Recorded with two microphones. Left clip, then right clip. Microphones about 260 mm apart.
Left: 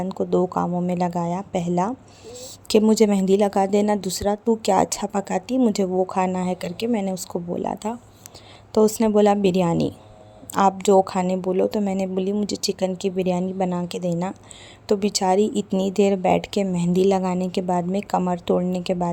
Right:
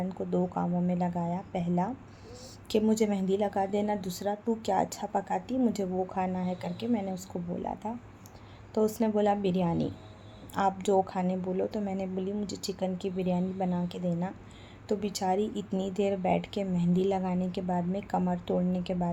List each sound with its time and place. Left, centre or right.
0.0 s speech: left